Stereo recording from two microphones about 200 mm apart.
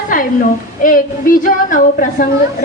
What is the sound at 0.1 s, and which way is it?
A woman's voice, 45° left (ahead or behind).